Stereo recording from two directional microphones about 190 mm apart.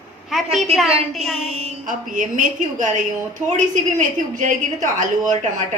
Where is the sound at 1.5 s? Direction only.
35° right (ahead or behind).